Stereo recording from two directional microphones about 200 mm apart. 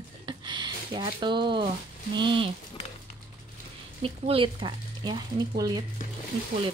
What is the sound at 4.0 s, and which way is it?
Speech, 25° right (ahead or behind).